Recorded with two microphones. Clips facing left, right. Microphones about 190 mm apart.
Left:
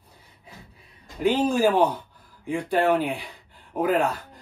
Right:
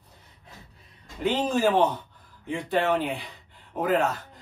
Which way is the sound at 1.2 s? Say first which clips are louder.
Left 3 dB; 10° left (ahead or behind).